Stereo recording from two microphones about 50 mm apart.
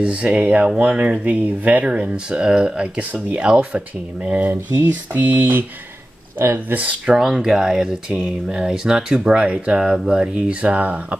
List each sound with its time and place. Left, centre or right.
0.0 s speech: right
1.2 s a sound: right
1.9 s speech: centre
3.0 s speech: right
4.5 s a sound: right
6.3 s speech: right
6.7 s a sound: right
7.2 s speech: centre
10.6 s speech: right